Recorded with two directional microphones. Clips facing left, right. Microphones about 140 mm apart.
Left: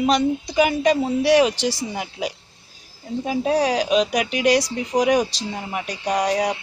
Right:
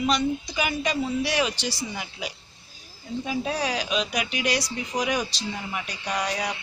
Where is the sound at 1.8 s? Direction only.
45° left (ahead or behind).